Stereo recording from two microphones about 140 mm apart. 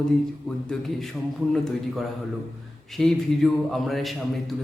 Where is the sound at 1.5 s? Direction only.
Centre (ahead or behind).